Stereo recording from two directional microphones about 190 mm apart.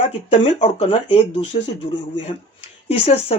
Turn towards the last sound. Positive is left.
turn(degrees=35)  # may be behind; listen again after turning